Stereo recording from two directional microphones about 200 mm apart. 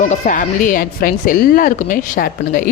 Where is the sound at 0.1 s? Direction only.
40° left (ahead or behind).